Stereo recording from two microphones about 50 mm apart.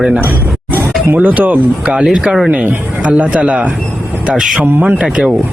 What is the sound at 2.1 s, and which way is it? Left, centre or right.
Speech, centre.